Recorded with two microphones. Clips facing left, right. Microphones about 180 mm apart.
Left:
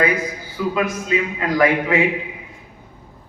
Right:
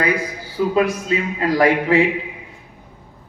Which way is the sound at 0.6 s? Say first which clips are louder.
Right 4 dB; 40° right (ahead or behind).